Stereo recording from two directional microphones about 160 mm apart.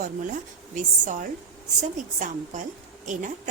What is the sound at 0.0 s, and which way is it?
A woman's voice, 50° right (ahead or behind).